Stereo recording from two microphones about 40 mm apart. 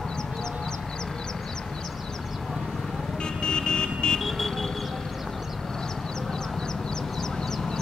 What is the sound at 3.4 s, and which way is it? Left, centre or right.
Vehicle, left.